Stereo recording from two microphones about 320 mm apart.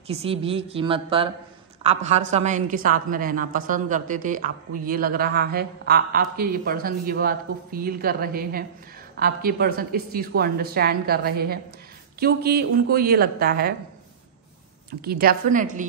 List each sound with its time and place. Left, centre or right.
0.1 s a woman's voice: centre
14.9 s a woman's voice: right